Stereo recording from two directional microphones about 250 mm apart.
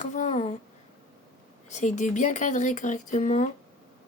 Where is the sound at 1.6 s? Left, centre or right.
Left.